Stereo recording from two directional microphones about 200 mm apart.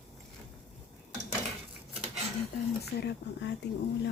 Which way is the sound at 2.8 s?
55° left (ahead or behind).